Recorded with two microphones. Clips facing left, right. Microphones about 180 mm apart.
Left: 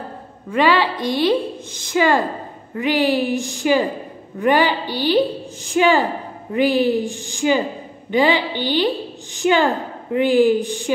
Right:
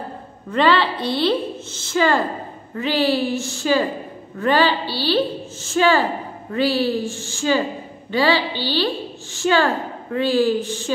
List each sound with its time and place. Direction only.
0.5 s a woman's voice: 10° left (ahead or behind)